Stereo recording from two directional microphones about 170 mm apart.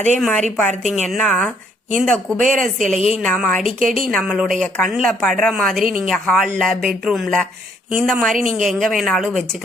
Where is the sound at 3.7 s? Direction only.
55° right (ahead or behind).